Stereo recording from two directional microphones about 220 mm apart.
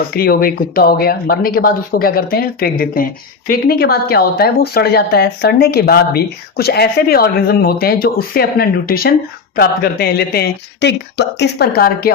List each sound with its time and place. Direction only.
0.2 s speech: 40° left (ahead or behind)